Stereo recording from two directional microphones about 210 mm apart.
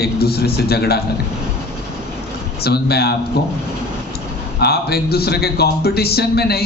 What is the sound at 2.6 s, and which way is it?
Speech, 50° left (ahead or behind).